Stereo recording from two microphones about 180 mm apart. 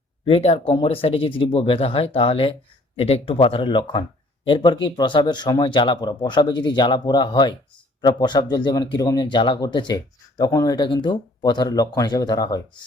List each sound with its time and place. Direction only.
0.3 s speech: 30° left (ahead or behind)